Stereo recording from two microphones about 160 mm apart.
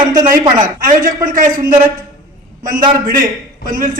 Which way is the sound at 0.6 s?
60° right (ahead or behind).